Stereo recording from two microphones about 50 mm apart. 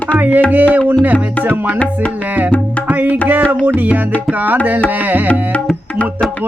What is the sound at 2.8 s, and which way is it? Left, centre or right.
Music, right.